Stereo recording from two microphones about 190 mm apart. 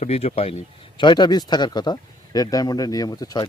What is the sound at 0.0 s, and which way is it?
A man's voice, 35° left (ahead or behind).